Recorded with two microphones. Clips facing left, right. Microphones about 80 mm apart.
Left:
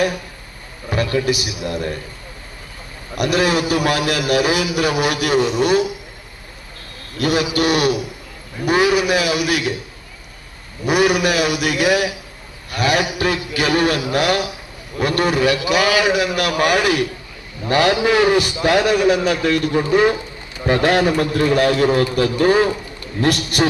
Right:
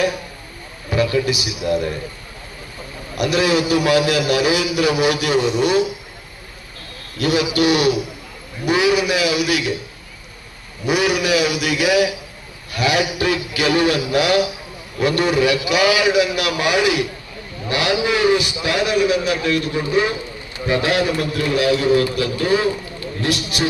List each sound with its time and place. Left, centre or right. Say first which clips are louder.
0.9 s a man's voice: right 1 dB; left
3.2 s a man's voice: even; left
7.2 s a man's voice: even; left
10.8 s a man's voice: left 2 dB; left